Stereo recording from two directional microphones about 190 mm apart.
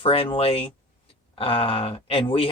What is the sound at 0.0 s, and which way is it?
Speech, 30° left (ahead or behind).